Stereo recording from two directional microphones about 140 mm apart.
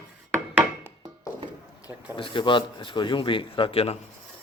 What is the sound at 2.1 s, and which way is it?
Speech, 35° left (ahead or behind).